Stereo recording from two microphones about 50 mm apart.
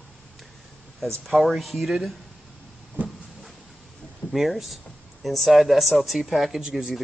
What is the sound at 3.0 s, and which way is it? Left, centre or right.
Vehicle, right.